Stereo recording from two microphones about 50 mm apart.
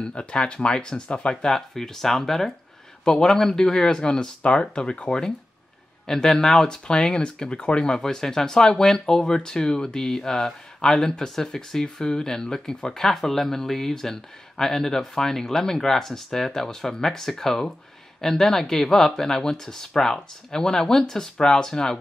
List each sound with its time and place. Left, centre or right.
0.0 s speech: centre